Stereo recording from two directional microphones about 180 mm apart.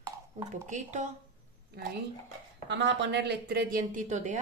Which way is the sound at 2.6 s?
85° right.